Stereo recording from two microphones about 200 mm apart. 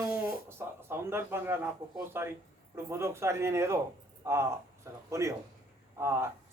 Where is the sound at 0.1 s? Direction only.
10° right (ahead or behind).